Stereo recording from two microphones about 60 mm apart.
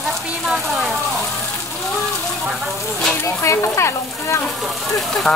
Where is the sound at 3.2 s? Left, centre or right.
Left.